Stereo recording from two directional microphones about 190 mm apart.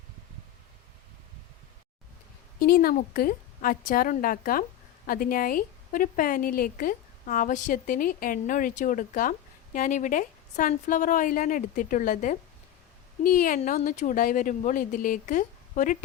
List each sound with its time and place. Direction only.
2.6 s a woman's voice: 50° left (ahead or behind)